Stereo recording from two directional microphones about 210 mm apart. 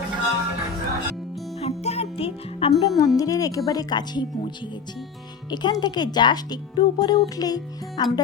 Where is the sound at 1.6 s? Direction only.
30° left (ahead or behind).